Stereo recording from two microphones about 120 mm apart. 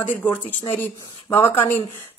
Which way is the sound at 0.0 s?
15° left (ahead or behind).